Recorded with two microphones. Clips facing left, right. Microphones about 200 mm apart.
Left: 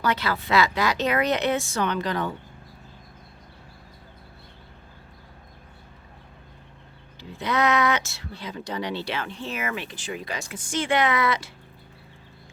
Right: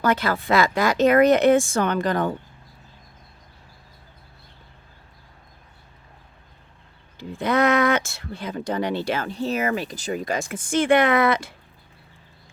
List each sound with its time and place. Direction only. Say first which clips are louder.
0.0 s speech: right 4 dB; 50° right (ahead or behind)
7.2 s speech: right 4 dB; 50° right (ahead or behind)